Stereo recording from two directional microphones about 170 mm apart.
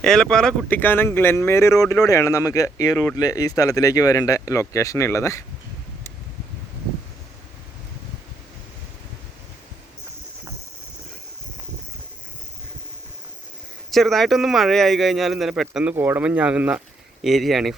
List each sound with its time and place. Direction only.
0.0 s speech: 5° left (ahead or behind)
13.9 s a man's voice: centre (ahead or behind)